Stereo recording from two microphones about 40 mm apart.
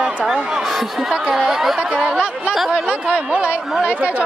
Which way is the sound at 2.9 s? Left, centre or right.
Right.